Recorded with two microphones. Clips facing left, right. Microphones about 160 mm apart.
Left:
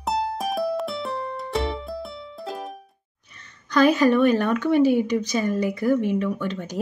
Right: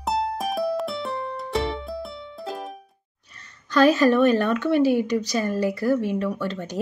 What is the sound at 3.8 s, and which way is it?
Speech, 15° left (ahead or behind).